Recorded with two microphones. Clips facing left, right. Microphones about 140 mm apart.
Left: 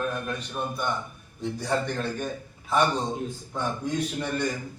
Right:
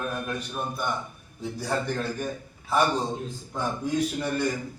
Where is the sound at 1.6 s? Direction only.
5° right (ahead or behind).